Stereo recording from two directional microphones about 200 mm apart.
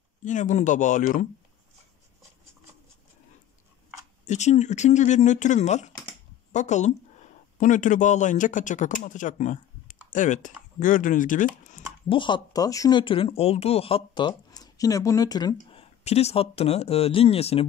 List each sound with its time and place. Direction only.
0.2 s speech: 40° left (ahead or behind)
4.3 s speech: 35° left (ahead or behind)
12.1 s speech: 25° left (ahead or behind)
15.5 s speech: 30° left (ahead or behind)